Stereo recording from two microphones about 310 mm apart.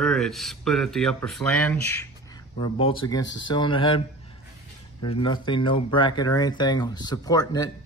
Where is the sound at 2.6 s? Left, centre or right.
Centre.